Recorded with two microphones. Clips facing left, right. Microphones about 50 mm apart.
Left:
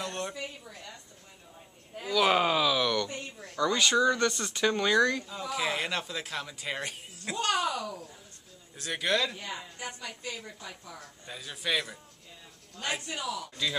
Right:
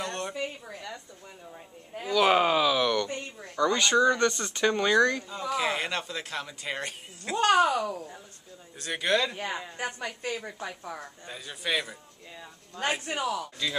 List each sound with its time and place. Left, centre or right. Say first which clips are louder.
0.0 s a sound: right 2 dB; centre
0.3 s a woman's voice: right 5 dB; right
2.0 s speech: right 3 dB; centre
3.2 s a sound: right 3 dB; centre
3.8 s speech: right 2 dB; centre
7.3 s speech: right 7 dB; right
8.7 s speech: right 2 dB; centre
9.8 s speech: right 6 dB; right
11.0 s speech: right 3 dB; centre
12.8 s a man's voice: right 5 dB; right
13.2 s speech: right 5 dB; right